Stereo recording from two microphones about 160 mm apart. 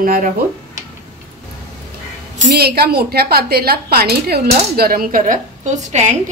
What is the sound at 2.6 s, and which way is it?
A woman's voice, 80° right.